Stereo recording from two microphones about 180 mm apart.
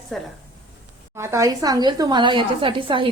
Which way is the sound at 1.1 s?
15° right (ahead or behind).